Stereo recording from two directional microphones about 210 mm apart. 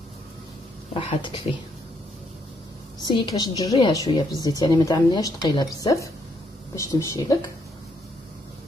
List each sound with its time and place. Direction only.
0.9 s a woman's voice: 25° left (ahead or behind)
3.0 s a woman's voice: 20° left (ahead or behind)